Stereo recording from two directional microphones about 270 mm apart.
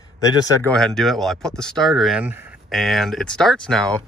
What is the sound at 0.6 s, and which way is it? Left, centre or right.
Speech, centre.